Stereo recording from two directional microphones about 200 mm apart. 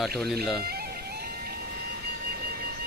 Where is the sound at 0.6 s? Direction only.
50° right (ahead or behind).